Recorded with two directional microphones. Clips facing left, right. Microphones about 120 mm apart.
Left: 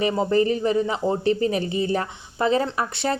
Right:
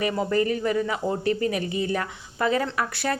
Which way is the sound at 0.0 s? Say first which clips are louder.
Left 3 dB; 25° left (ahead or behind).